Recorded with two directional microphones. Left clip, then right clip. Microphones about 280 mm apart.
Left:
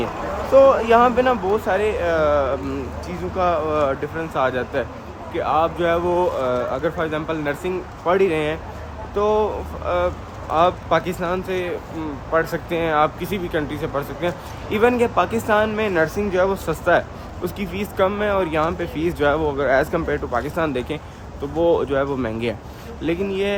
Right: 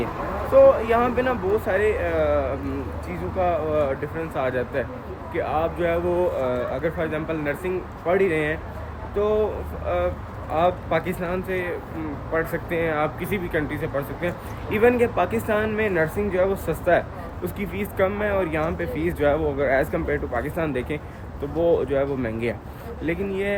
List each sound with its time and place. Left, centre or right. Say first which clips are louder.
0.9 s speech: left 6 dB; centre
3.4 s speech: left 3 dB; centre
10.5 s speech: left 4 dB; centre